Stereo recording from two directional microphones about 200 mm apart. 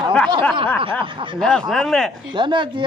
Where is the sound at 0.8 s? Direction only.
25° right (ahead or behind).